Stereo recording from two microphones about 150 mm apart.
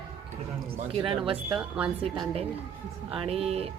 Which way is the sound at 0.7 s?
40° right (ahead or behind).